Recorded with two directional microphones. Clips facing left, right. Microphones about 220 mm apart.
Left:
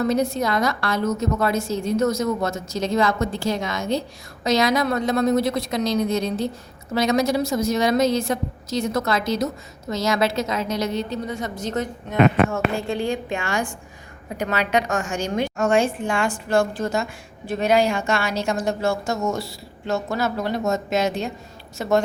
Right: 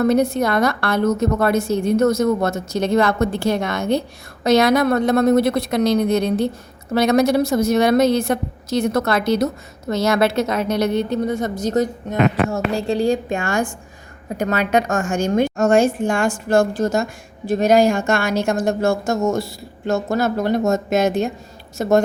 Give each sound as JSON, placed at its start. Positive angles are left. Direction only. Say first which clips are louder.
{"t": 0.0, "sound": "a woman's voice", "louder": "right 5 dB", "side_deg": -60}
{"t": 11.6, "sound": "a woman's voice", "louder": "right 7 dB", "side_deg": -40}